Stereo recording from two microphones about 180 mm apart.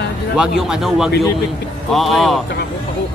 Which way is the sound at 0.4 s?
5° right (ahead or behind).